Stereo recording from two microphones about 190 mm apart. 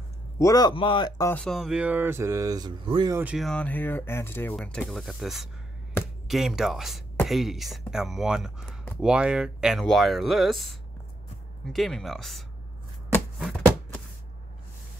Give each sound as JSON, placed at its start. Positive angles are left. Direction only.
{"t": 0.4, "sound": "speech", "side_deg": 20}
{"t": 1.3, "sound": "speech", "side_deg": 5}
{"t": 3.1, "sound": "speech", "side_deg": -10}
{"t": 3.3, "sound": "speech", "side_deg": 5}